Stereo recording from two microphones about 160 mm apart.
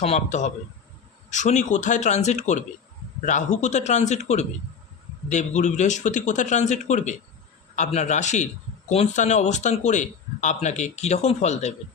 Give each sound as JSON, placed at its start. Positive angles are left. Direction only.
{"t": 0.0, "sound": "a man's voice", "side_deg": 45}